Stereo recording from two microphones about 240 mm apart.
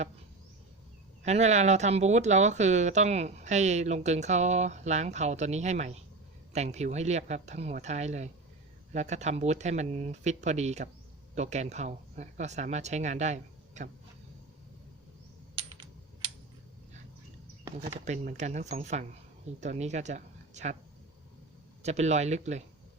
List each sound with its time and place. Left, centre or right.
1.2 s speech: right
17.8 s speech: right
21.8 s speech: right